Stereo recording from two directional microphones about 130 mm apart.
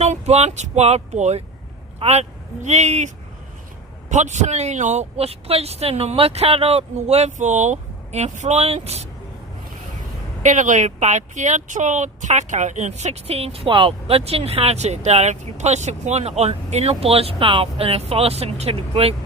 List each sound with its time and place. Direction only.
0.0 s speech: 60° right (ahead or behind)
4.1 s speech: 65° right (ahead or behind)
10.4 s speech: 70° right (ahead or behind); by 19.1 s 50° right (ahead or behind)